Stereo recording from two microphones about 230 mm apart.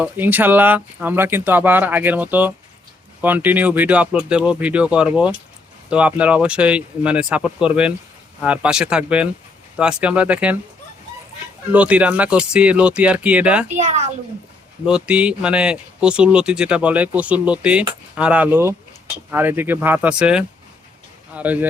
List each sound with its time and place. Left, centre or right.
0.0 s a man's voice: centre
11.7 s a man's voice: centre
13.7 s speech: right
14.8 s a man's voice: centre